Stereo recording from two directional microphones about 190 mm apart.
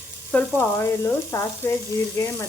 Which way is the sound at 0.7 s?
15° left (ahead or behind).